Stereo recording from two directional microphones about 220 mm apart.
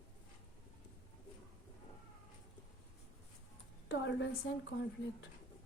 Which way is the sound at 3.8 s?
55° left (ahead or behind).